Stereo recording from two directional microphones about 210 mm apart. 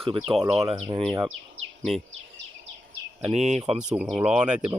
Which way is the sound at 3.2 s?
30° right (ahead or behind).